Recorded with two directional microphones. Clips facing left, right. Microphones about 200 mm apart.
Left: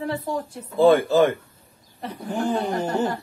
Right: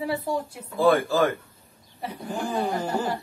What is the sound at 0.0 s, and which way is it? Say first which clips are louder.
Speech: even; 10° right (ahead or behind).